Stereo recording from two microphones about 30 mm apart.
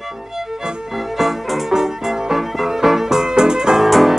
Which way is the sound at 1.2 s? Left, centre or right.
Centre.